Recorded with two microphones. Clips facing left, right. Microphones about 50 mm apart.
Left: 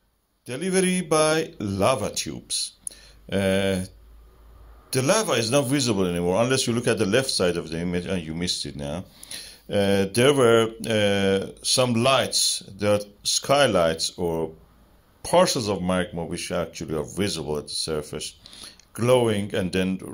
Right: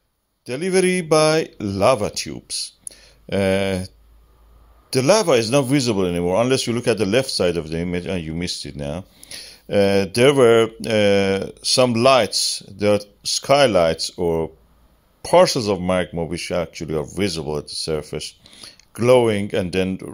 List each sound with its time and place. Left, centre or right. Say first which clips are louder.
0.5 s speech: right 5 dB; right
2.0 s speech: right 3 dB; right
4.8 s a man's voice: right 6 dB; right
9.3 s speech: right 6 dB; right
10.2 s speech: right 5 dB; right
12.3 s speech: right 1 dB; right
14.0 s a man's voice: right 5 dB; right
15.2 s speech: right 5 dB; right